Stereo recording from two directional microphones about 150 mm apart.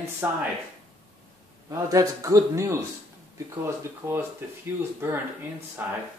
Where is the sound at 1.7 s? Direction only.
20° right (ahead or behind).